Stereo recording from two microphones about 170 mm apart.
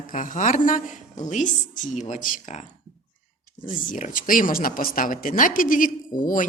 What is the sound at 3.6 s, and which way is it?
Speech, 50° left (ahead or behind).